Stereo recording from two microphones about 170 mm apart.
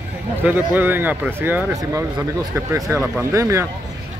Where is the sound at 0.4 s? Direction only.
10° right (ahead or behind).